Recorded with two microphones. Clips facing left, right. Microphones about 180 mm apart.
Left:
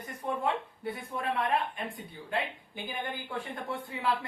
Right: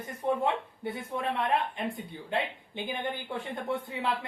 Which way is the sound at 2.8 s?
25° right (ahead or behind).